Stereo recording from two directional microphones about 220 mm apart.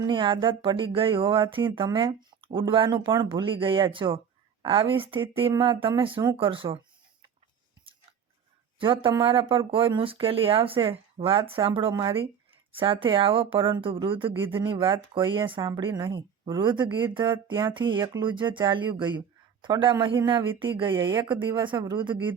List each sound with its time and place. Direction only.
0.0 s speech: 20° right (ahead or behind)
8.8 s speech: 20° right (ahead or behind)